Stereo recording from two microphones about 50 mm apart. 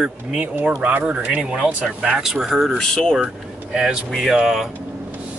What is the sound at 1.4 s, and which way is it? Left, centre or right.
Speech, centre.